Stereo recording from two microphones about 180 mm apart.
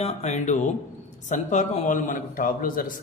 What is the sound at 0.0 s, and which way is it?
A man's voice, 40° left (ahead or behind).